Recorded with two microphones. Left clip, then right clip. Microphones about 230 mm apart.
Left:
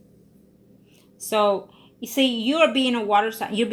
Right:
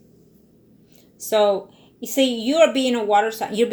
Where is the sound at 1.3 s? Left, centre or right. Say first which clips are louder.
Right 3 dB; left.